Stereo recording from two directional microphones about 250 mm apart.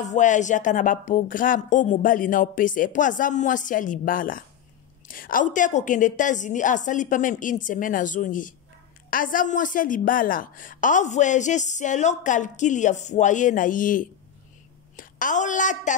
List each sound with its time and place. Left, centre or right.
0.0 s a woman's voice: left